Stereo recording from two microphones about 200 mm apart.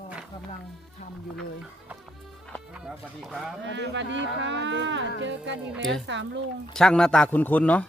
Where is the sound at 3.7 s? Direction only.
65° right (ahead or behind).